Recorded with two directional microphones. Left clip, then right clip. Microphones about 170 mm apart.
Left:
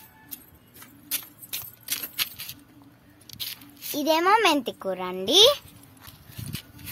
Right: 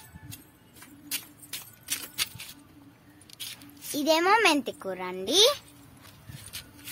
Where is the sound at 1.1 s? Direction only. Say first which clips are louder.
Left 2 dB; 55° left (ahead or behind).